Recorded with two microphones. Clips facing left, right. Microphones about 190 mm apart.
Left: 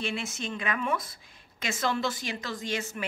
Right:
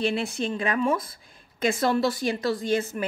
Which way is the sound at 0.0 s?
35° right (ahead or behind).